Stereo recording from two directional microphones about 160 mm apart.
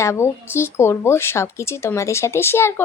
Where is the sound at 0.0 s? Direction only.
15° left (ahead or behind).